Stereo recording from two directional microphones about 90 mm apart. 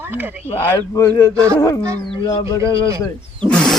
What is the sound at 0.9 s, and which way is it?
Speech, 35° left (ahead or behind).